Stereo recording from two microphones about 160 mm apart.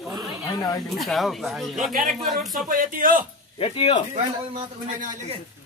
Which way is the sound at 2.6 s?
60° right (ahead or behind).